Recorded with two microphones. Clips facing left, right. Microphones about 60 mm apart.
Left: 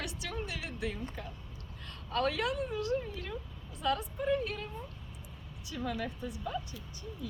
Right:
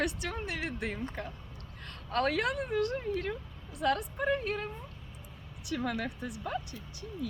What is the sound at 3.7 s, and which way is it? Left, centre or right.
Speech, right.